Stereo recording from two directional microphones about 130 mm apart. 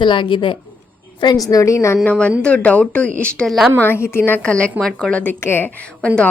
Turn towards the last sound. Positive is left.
turn(degrees=10)  # may be behind; listen again after turning